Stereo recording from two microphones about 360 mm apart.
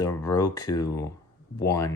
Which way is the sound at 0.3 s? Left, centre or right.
Centre.